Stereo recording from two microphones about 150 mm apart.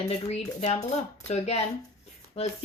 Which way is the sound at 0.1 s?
45° left (ahead or behind).